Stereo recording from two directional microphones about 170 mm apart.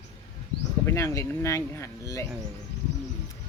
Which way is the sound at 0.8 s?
15° left (ahead or behind).